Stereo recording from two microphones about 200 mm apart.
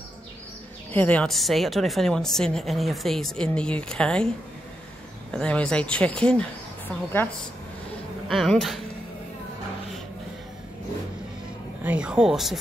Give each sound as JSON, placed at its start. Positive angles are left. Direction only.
{"t": 0.9, "sound": "a woman's voice", "side_deg": 5}
{"t": 5.3, "sound": "a woman's voice", "side_deg": 5}
{"t": 8.3, "sound": "a woman's voice", "side_deg": 0}
{"t": 11.8, "sound": "a woman's voice", "side_deg": -5}